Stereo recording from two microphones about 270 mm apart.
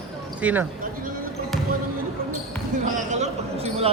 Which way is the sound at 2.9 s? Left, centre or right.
Right.